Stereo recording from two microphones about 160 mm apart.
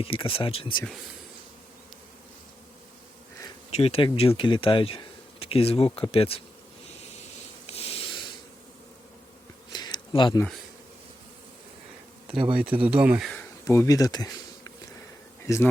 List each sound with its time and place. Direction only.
0.0 s speech: 35° left (ahead or behind)
3.7 s speech: 40° left (ahead or behind)
7.7 s a sound: 40° left (ahead or behind)
9.7 s a sound: 30° left (ahead or behind)
12.3 s speech: 35° right (ahead or behind)
12.8 s speech: 5° right (ahead or behind)
13.7 s speech: 20° left (ahead or behind)